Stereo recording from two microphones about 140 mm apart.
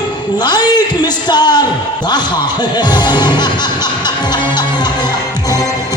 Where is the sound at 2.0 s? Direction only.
30° left (ahead or behind).